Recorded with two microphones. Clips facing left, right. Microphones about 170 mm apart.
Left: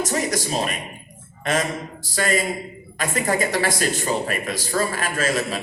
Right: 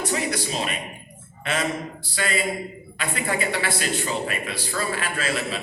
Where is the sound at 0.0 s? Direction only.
40° left (ahead or behind).